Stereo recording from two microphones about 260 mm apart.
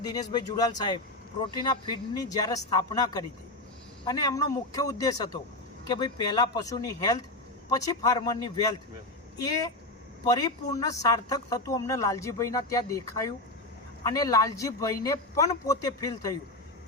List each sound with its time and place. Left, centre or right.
0.0 s speech: centre
10.2 s speech: centre